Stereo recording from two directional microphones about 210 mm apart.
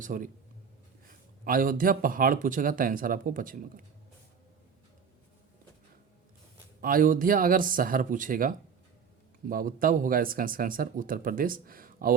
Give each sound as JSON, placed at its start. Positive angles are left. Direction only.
{"t": 0.0, "sound": "speech", "side_deg": -40}
{"t": 1.5, "sound": "speech", "side_deg": -45}
{"t": 6.8, "sound": "speech", "side_deg": -40}